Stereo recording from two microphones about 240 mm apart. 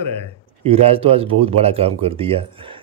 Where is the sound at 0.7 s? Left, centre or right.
Right.